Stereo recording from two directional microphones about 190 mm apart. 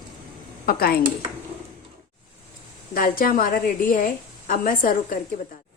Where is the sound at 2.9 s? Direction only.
50° left (ahead or behind).